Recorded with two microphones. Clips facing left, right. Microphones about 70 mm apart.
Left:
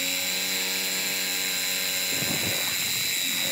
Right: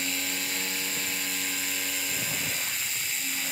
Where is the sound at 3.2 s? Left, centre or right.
Left.